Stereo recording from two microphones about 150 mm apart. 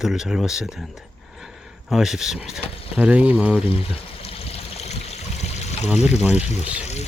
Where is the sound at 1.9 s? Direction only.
Centre (ahead or behind).